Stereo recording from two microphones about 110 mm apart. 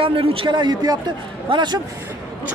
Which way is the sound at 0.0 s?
55° right (ahead or behind).